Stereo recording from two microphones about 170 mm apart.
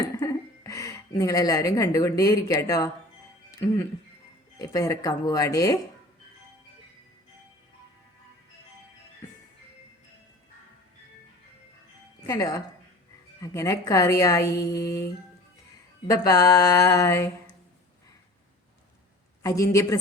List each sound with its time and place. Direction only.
0.0 s a sound: 20° left (ahead or behind)
1.2 s a woman's voice: 20° left (ahead or behind)
4.5 s a woman's voice: 20° left (ahead or behind)
12.2 s a woman's voice: 20° left (ahead or behind)
19.4 s a woman's voice: 20° left (ahead or behind)